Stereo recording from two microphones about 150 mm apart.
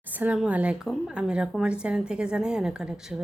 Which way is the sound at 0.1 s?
10° right (ahead or behind).